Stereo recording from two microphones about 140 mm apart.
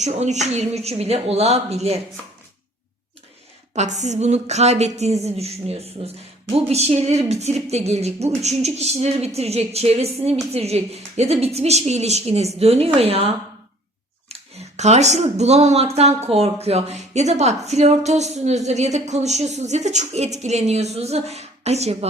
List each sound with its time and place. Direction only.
0.0 s speech: 55° right (ahead or behind)
3.8 s speech: 55° right (ahead or behind)
14.8 s speech: 55° right (ahead or behind)